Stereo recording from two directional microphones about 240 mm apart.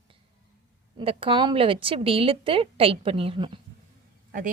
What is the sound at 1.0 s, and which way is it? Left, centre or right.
Speech, right.